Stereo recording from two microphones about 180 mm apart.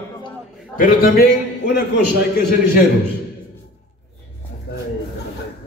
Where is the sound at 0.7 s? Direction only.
50° left (ahead or behind).